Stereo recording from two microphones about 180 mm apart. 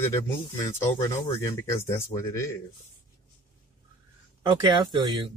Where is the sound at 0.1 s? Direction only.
15° left (ahead or behind).